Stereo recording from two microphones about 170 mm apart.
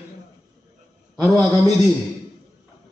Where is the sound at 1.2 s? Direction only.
Centre (ahead or behind).